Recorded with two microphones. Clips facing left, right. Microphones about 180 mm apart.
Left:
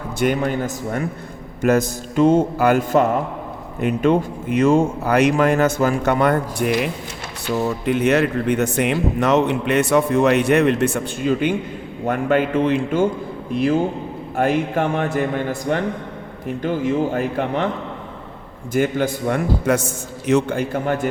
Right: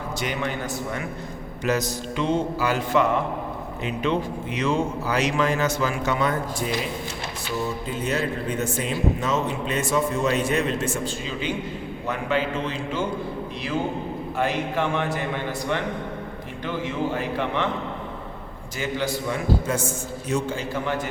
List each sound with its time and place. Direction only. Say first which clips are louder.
0.3 s a man's voice: left 6 dB; 45° left (ahead or behind)
18.7 s a man's voice: left 8 dB; 55° left (ahead or behind)